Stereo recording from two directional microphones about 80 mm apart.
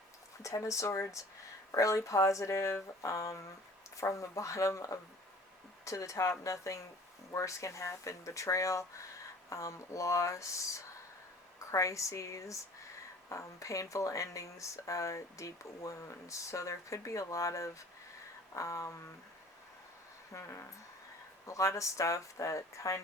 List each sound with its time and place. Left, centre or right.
0.4 s speech: left
20.3 s speech: left